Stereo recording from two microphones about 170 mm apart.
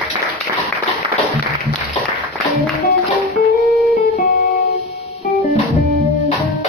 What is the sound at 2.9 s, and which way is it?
Music, 70° left (ahead or behind).